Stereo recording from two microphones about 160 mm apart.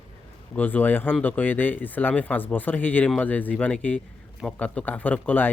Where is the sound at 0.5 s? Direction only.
10° left (ahead or behind).